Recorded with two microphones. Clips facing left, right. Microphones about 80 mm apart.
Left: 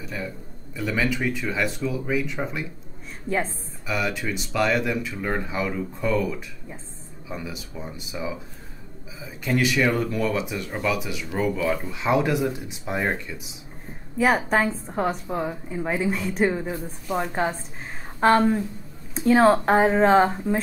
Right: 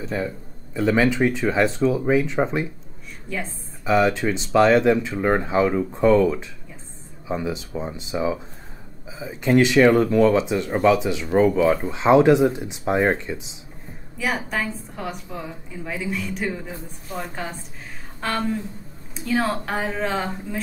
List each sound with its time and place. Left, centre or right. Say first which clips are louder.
0.0 s a sound: right 6 dB; right
0.7 s speech: right 7 dB; right
3.3 s a woman's voice: left 5 dB; left
3.8 s speech: right 8 dB; right
14.1 s a woman's voice: left 5 dB; left